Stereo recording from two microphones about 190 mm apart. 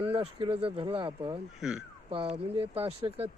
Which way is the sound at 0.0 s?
30° right (ahead or behind).